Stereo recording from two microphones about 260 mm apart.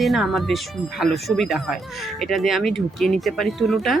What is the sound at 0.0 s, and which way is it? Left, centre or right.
Speech, centre.